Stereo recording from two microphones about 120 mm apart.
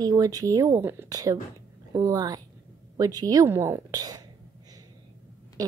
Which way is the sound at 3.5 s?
20° right (ahead or behind).